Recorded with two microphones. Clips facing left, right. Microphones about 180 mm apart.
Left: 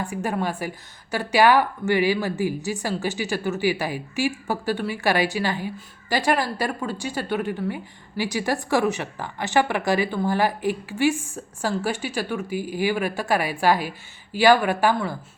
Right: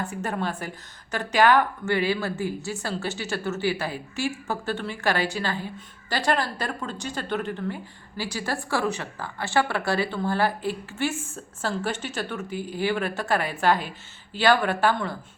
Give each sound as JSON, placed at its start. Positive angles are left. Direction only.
{"t": 0.0, "sound": "speech", "side_deg": 15}